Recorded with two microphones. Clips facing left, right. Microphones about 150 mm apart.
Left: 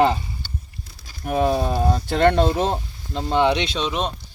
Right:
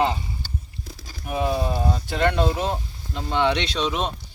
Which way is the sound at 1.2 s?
45° left (ahead or behind).